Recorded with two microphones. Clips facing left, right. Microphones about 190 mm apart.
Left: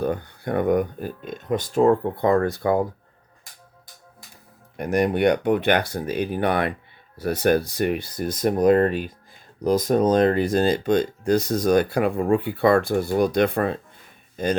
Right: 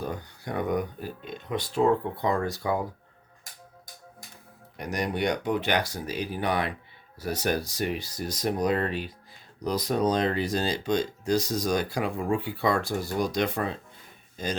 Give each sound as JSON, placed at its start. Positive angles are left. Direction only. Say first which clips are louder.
{"t": 0.0, "sound": "speech", "louder": "left 9 dB", "side_deg": 60}
{"t": 4.8, "sound": "speech", "louder": "left 9 dB", "side_deg": 55}